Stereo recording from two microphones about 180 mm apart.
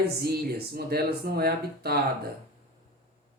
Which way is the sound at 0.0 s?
60° right (ahead or behind).